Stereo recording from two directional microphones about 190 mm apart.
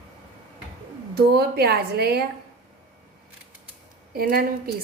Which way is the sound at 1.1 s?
55° right (ahead or behind).